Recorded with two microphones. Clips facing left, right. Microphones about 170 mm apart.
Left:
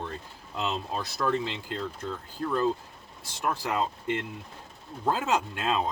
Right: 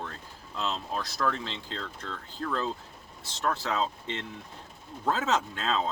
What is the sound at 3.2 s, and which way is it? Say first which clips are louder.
Speech: even; 15° left (ahead or behind).